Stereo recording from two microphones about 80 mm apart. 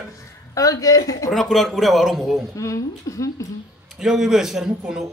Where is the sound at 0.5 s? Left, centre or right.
Left.